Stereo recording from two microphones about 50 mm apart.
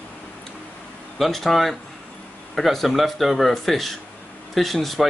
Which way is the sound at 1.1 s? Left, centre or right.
Centre.